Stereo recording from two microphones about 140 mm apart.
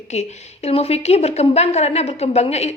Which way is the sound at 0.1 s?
50° left (ahead or behind).